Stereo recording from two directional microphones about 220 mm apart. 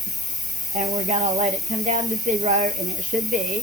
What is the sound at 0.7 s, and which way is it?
Speech, 30° right (ahead or behind).